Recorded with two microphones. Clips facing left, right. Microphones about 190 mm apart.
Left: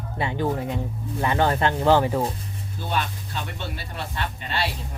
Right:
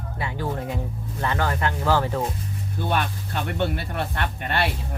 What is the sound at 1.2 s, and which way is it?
Speech, 15° left (ahead or behind).